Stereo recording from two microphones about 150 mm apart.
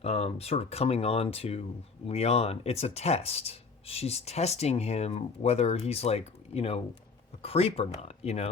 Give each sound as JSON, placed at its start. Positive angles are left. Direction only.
{"t": 0.0, "sound": "speech", "side_deg": 40}